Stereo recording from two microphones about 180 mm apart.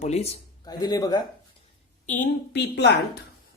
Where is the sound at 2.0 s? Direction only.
50° left (ahead or behind).